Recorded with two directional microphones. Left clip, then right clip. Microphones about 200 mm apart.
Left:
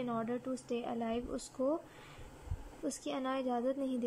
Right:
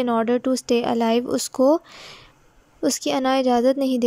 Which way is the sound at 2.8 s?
45° right (ahead or behind).